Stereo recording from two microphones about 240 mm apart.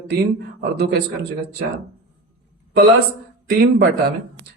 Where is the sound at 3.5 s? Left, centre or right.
Right.